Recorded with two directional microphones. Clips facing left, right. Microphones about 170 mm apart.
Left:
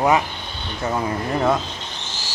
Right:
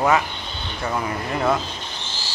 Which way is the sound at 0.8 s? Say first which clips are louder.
Left 3 dB; 25° left (ahead or behind).